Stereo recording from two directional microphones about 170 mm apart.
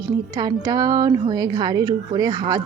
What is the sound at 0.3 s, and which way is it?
A woman's voice, 20° right (ahead or behind).